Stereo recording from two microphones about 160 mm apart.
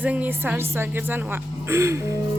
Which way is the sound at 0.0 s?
10° right (ahead or behind).